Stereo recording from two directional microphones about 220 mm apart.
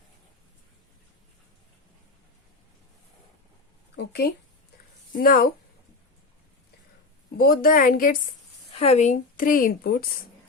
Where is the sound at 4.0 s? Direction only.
45° left (ahead or behind).